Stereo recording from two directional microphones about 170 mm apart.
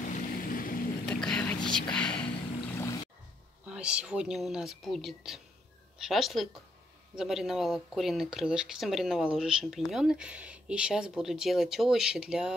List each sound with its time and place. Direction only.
0.1 s vehicle: 55° left (ahead or behind)
1.0 s whispering: 5° left (ahead or behind)
3.6 s speech: 5° right (ahead or behind)